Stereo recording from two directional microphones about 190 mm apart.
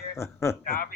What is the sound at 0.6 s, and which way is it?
Speech, 50° left (ahead or behind).